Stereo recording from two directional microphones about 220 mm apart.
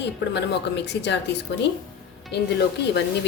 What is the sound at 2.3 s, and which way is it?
Speech, 50° left (ahead or behind).